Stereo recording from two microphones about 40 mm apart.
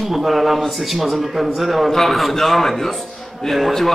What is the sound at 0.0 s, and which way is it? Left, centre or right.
Speech, centre.